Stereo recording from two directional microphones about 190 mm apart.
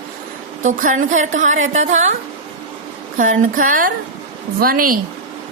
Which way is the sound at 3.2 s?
45° right (ahead or behind).